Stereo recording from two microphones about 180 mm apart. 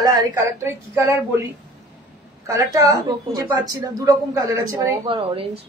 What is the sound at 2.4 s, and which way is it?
A woman's voice, 20° right (ahead or behind).